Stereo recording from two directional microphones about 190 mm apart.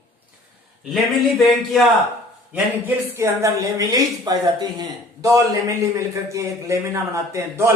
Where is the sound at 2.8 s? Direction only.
15° right (ahead or behind).